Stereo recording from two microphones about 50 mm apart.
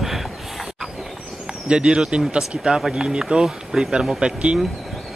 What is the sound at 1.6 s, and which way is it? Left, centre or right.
Speech, centre.